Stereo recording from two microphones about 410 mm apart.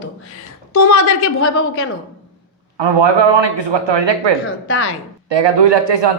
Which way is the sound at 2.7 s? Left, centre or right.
Right.